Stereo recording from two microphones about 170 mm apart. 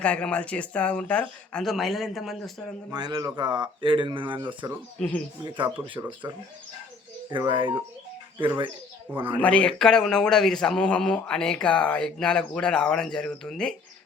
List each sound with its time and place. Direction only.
0.0 s speech: 5° left (ahead or behind)
2.9 s speech: 25° right (ahead or behind)
4.9 s speech: 5° left (ahead or behind)
6.2 s speech: 25° right (ahead or behind)
9.4 s a man's voice: 5° left (ahead or behind)